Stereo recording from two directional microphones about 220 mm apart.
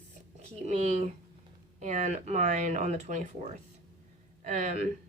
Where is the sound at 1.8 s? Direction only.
35° right (ahead or behind).